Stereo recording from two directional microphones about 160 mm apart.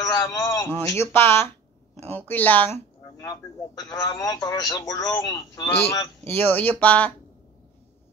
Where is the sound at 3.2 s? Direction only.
25° left (ahead or behind).